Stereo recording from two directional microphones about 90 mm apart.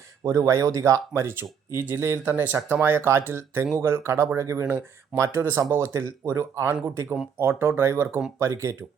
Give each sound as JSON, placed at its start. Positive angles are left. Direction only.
{"t": 0.3, "sound": "speech", "side_deg": -40}